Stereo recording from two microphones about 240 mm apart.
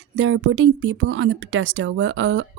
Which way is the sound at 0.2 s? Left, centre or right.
Right.